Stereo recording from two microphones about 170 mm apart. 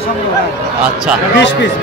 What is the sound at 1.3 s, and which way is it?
Speech, 90° left.